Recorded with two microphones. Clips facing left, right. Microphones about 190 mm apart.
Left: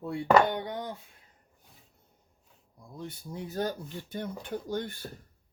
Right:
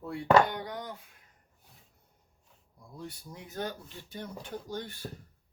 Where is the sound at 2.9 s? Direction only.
25° left (ahead or behind); by 4.8 s 55° left (ahead or behind).